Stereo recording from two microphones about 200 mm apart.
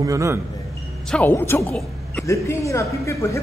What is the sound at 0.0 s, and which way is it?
Speech, 15° right (ahead or behind).